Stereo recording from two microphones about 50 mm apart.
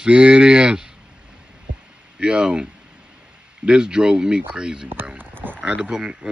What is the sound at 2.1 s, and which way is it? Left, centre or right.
Speech, centre.